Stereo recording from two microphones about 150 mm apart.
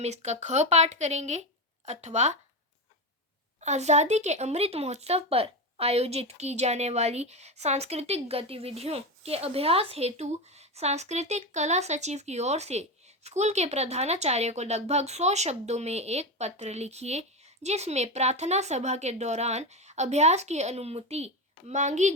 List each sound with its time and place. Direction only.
0.0 s speech: 50° right (ahead or behind)
3.6 s speech: 50° right (ahead or behind)